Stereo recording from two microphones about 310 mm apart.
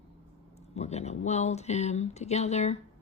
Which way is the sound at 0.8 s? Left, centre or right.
Left.